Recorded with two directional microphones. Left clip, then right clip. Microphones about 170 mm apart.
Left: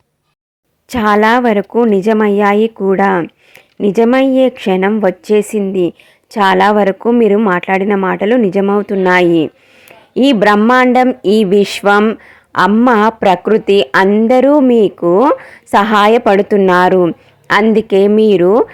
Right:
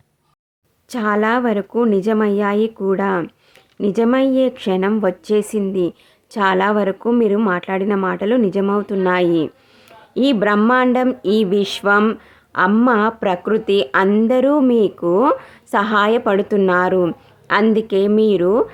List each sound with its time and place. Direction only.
0.9 s speech: 30° left (ahead or behind)
12.2 s a sound: 25° left (ahead or behind)
12.9 s speech: 25° left (ahead or behind)